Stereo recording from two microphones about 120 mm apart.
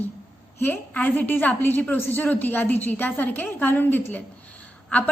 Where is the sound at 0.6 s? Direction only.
15° left (ahead or behind).